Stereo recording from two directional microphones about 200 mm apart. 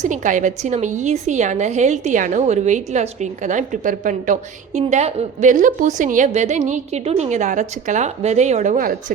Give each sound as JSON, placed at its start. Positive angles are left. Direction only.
{"t": 0.0, "sound": "a woman's voice", "side_deg": -40}